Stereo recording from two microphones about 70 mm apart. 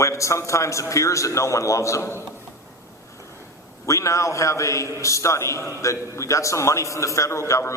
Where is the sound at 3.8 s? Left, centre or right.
Left.